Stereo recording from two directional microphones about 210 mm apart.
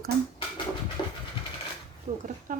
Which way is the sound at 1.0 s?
20° left (ahead or behind).